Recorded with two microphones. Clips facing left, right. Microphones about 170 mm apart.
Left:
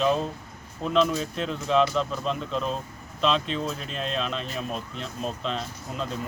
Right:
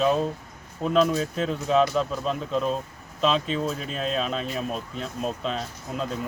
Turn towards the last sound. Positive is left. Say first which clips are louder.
# right 1 dB
turn(degrees=-5)  # may be behind; listen again after turning